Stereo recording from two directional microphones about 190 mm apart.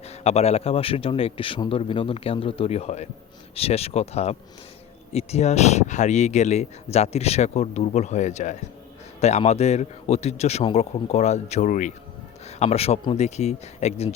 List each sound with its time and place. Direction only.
0.1 s speech: 35° left (ahead or behind)